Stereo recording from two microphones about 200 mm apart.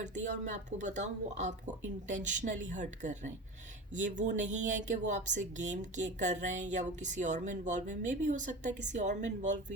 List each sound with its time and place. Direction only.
0.0 s speech: 35° right (ahead or behind)